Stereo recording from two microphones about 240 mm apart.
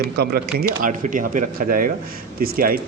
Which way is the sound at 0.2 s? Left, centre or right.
Right.